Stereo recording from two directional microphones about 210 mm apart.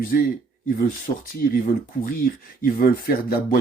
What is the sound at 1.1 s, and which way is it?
Speech, 35° left (ahead or behind).